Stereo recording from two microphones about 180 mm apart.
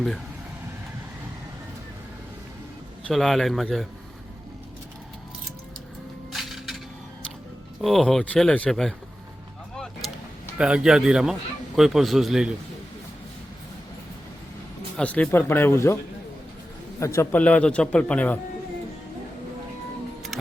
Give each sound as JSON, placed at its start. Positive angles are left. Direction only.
{"t": 3.1, "sound": "speech", "side_deg": 0}
{"t": 6.3, "sound": "a sound", "side_deg": 0}
{"t": 7.8, "sound": "speech", "side_deg": 0}
{"t": 10.6, "sound": "speech", "side_deg": -5}
{"t": 14.9, "sound": "a man's voice", "side_deg": 5}
{"t": 17.2, "sound": "a man's voice", "side_deg": 10}
{"t": 20.3, "sound": "music", "side_deg": 0}